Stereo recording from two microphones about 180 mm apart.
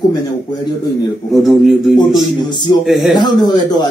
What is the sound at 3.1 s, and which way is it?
Speech, 25° left (ahead or behind).